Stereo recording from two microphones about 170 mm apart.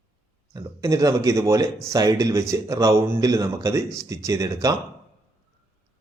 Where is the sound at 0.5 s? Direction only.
20° right (ahead or behind).